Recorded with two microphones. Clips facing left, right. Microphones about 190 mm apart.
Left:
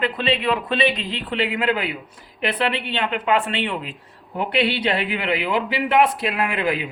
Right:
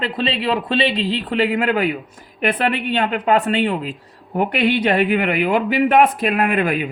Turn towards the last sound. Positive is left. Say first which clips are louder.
# right 4 dB
turn(degrees=-50)  # may be behind; listen again after turning